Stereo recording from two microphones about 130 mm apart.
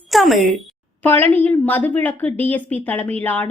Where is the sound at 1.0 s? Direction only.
15° left (ahead or behind).